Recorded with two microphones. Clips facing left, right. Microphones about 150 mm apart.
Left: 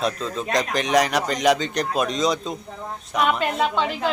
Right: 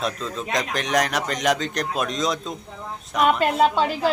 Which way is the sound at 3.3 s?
40° right (ahead or behind).